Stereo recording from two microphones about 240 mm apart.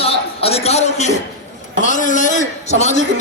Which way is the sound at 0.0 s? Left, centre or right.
Left.